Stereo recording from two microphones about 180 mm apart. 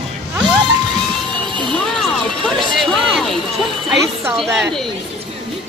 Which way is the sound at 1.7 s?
5° left (ahead or behind).